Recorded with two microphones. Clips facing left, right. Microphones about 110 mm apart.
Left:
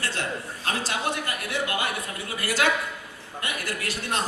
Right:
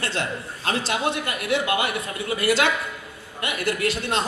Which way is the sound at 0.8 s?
20° right (ahead or behind).